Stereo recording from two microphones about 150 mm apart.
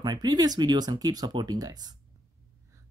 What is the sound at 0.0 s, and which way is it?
Speech, 25° right (ahead or behind).